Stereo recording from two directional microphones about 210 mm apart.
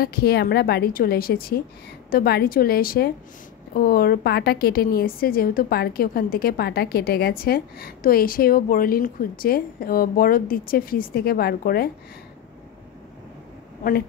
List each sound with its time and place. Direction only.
0.0 s a woman's voice: 45° left (ahead or behind)